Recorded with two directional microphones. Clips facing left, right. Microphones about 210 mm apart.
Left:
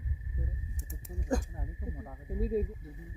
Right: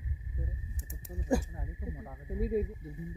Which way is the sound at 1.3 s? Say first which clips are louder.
Right 2 dB; centre (ahead or behind).